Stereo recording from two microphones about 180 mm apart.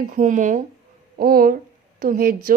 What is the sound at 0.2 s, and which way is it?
Speech, 45° right (ahead or behind).